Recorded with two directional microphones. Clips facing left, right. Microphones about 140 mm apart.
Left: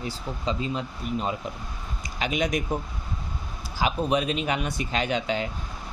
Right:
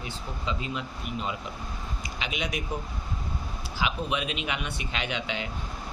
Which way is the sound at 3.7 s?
40° left (ahead or behind).